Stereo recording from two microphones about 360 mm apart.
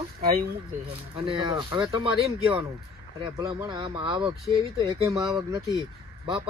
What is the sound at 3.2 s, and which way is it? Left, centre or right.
Speech, centre.